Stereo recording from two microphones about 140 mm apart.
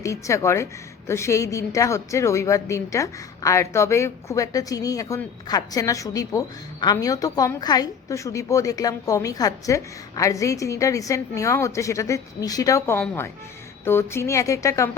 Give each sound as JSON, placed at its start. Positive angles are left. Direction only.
{"t": 0.0, "sound": "a woman's voice", "side_deg": 20}